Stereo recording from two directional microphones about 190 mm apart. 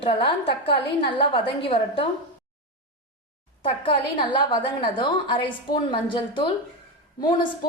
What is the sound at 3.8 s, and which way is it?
A woman's voice, 25° left (ahead or behind).